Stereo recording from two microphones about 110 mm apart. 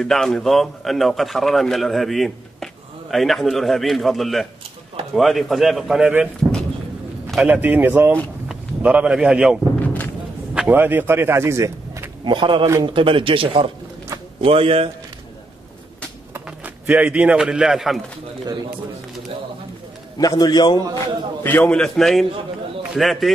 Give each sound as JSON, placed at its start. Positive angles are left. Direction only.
{"t": 0.0, "sound": "a man's voice", "side_deg": 5}
{"t": 7.4, "sound": "a man's voice", "side_deg": -15}
{"t": 9.8, "sound": "a sound", "side_deg": 15}
{"t": 10.7, "sound": "speech", "side_deg": -15}
{"t": 12.3, "sound": "speech", "side_deg": -50}
{"t": 16.8, "sound": "a man's voice", "side_deg": -15}
{"t": 20.2, "sound": "a man's voice", "side_deg": 35}
{"t": 20.9, "sound": "a man's voice", "side_deg": 20}
{"t": 21.7, "sound": "a man's voice", "side_deg": 5}